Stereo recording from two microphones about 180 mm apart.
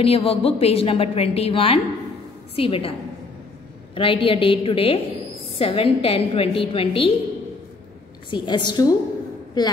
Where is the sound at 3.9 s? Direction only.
30° left (ahead or behind).